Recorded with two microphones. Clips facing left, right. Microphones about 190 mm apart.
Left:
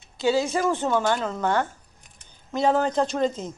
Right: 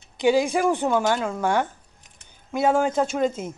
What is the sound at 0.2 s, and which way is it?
A woman's voice, 15° right (ahead or behind).